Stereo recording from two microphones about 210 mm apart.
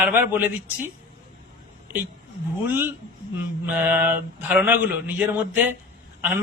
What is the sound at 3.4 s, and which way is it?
A man's voice, 5° right (ahead or behind).